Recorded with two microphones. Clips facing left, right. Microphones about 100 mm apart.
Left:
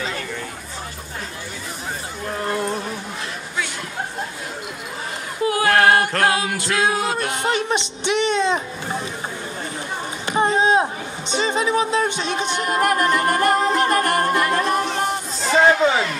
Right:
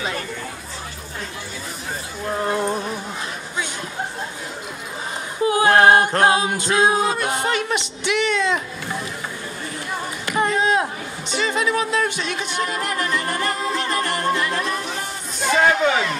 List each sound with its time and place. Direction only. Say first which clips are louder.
2.3 s music: right 2 dB; 20° right (ahead or behind)
5.4 s a capella: right 2 dB; 25° right (ahead or behind)
7.4 s speech: left 1 dB; 20° left (ahead or behind)
10.2 s a sound: left 2 dB; 25° left (ahead or behind)
12.6 s music: left 9 dB; 50° left (ahead or behind)